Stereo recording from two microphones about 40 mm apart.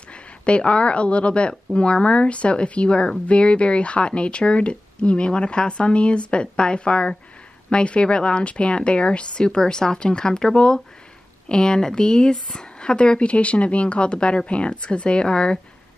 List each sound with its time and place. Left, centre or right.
0.1 s speech: left